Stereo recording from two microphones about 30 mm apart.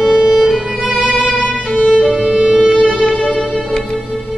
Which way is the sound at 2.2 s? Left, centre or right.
Right.